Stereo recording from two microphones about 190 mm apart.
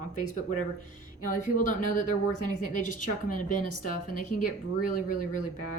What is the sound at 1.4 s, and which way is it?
A woman's voice, 40° left (ahead or behind).